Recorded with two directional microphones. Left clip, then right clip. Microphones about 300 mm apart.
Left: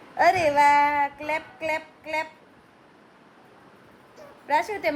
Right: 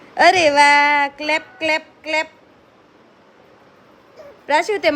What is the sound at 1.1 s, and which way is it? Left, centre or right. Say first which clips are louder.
A woman's voice: right 8 dB; right.